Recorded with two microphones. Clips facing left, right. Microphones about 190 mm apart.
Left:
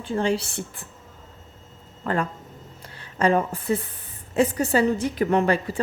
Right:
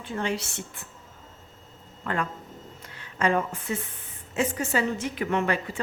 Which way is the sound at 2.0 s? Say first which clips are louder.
Left 4 dB; 35° left (ahead or behind).